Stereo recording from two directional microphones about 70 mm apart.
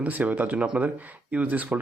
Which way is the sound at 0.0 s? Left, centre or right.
Right.